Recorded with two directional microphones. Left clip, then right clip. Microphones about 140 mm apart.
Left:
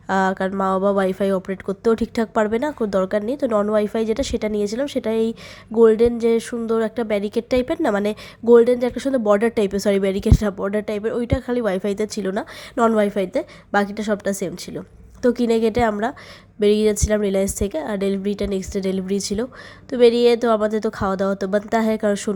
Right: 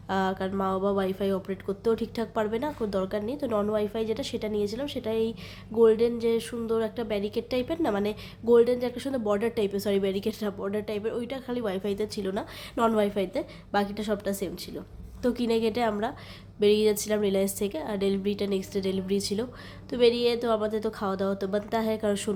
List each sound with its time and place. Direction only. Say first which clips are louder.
0.1 s a woman's voice: left 8 dB; 45° left (ahead or behind)